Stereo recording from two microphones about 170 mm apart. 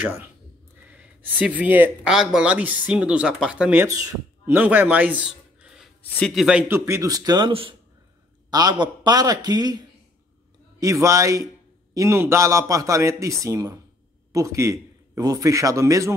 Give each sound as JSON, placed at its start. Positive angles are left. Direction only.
{"t": 0.0, "sound": "a man's voice", "side_deg": -10}
{"t": 6.7, "sound": "a man's voice", "side_deg": -15}